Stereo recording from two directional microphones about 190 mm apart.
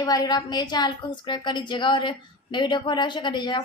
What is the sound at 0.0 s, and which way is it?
A woman's voice, 20° left (ahead or behind).